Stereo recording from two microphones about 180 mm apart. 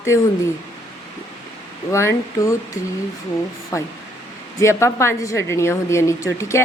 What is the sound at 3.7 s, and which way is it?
A man's voice, 15° left (ahead or behind).